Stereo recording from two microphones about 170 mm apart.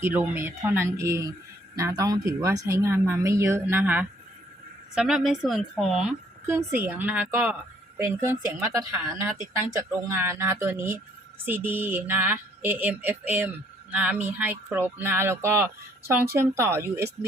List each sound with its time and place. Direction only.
0.0 s a woman's voice: 10° right (ahead or behind)
6.5 s speech: 15° right (ahead or behind)